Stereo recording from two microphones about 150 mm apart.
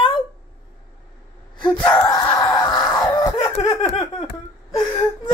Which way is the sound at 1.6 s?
30° left (ahead or behind).